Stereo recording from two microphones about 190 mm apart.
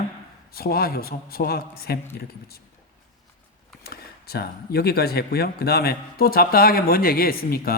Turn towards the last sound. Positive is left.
turn(degrees=50)  # may be behind; listen again after turning